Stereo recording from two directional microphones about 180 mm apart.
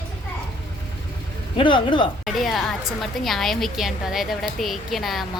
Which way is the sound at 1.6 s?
25° left (ahead or behind).